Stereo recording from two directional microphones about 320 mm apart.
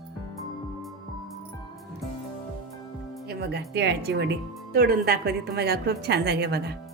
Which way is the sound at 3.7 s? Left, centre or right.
Right.